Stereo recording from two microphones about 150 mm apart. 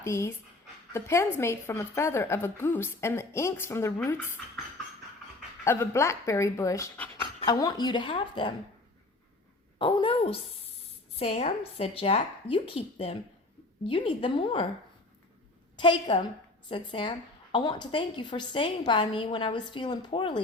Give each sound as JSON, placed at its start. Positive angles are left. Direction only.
{"t": 0.0, "sound": "a woman's voice", "side_deg": 20}
{"t": 5.6, "sound": "a woman's voice", "side_deg": 15}
{"t": 9.7, "sound": "a woman's voice", "side_deg": 35}
{"t": 15.7, "sound": "a woman's voice", "side_deg": 30}